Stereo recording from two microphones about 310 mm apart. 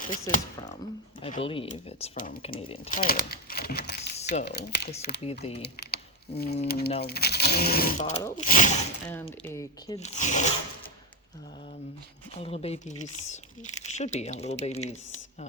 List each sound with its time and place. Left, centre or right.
0.1 s speech: left
5.2 s speech: centre
6.4 s speech: left
9.0 s speech: centre
12.4 s speech: centre